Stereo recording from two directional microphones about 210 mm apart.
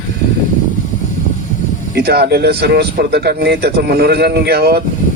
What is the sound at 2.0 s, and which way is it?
Speech, 50° right (ahead or behind).